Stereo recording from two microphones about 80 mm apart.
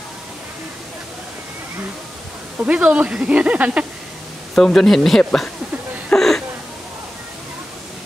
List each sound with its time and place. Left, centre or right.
2.6 s speech: centre
4.6 s speech: centre
6.1 s a sound: centre